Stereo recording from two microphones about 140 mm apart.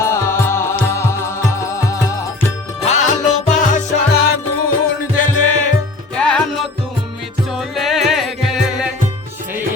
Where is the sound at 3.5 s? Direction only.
65° left (ahead or behind).